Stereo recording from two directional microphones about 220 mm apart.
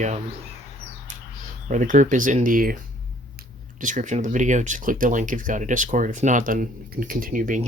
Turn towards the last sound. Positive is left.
turn(degrees=-40)  # may be behind; listen again after turning